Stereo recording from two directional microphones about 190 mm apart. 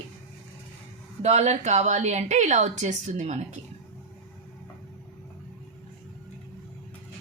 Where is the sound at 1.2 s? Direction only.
35° right (ahead or behind).